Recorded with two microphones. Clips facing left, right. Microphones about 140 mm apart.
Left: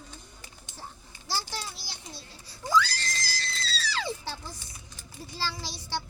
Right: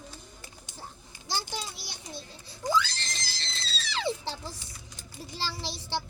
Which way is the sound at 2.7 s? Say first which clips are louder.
Left 5 dB; 25° right (ahead or behind).